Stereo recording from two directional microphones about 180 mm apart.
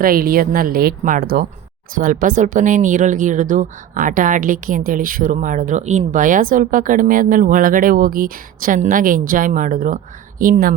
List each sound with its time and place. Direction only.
0.0 s speech: 55° right (ahead or behind)